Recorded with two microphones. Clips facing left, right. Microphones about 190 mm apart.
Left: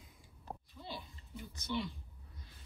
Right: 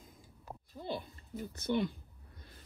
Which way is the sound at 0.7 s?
55° right (ahead or behind).